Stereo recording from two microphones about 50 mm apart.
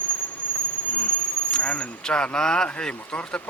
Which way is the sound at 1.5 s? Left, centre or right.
Left.